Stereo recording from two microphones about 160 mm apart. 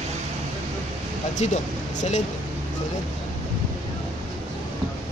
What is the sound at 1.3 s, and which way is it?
Speech, 50° left (ahead or behind).